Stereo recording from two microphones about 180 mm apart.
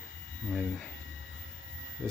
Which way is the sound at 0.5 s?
5° left (ahead or behind).